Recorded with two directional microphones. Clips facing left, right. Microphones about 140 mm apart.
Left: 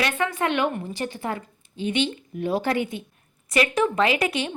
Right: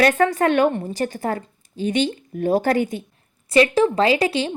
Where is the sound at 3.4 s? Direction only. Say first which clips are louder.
Right 6 dB; 30° right (ahead or behind).